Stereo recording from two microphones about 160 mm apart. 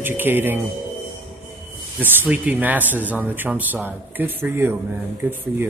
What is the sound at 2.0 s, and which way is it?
Speech, 10° right (ahead or behind).